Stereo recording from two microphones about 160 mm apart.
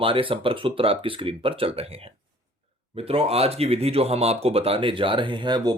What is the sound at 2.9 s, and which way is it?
Speech, 40° right (ahead or behind).